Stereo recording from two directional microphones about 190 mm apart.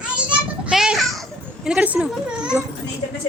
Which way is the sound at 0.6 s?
5° right (ahead or behind).